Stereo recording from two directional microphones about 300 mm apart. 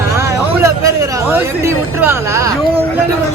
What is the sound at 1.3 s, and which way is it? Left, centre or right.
Speech, centre.